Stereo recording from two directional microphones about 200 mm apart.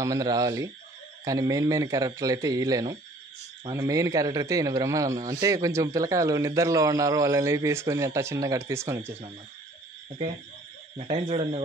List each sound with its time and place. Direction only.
0.0 s a man's voice: 20° right (ahead or behind)
11.0 s speech: 30° right (ahead or behind)